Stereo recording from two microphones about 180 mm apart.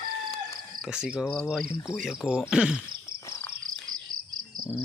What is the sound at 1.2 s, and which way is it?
Speech, 10° left (ahead or behind).